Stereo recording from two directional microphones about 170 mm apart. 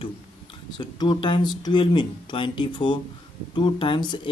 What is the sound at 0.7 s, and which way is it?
Speech, 25° left (ahead or behind).